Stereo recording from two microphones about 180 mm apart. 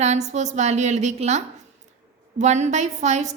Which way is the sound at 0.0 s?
40° right (ahead or behind).